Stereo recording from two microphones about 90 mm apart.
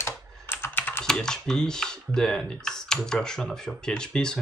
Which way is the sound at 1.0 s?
5° left (ahead or behind).